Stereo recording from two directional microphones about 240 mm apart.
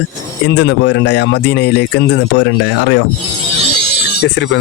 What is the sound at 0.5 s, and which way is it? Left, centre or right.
Speech, left.